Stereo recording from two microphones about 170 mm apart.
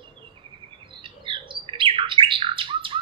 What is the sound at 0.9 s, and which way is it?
Bird, 30° right (ahead or behind).